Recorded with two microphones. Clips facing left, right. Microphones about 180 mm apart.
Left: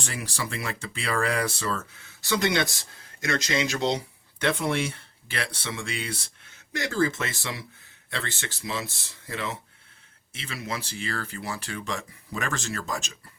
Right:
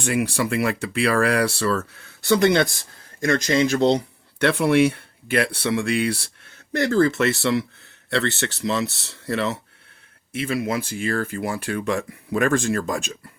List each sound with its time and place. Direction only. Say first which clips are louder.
0.0 s speech: right 12 dB; 60° right (ahead or behind); by 9.6 s 75° right (ahead or behind)
10.3 s speech: right 11 dB; 55° right (ahead or behind)